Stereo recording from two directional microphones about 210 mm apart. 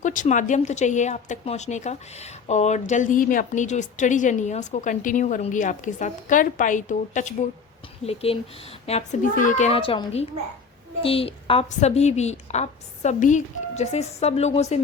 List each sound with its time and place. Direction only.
0.0 s a woman's voice: 35° left (ahead or behind)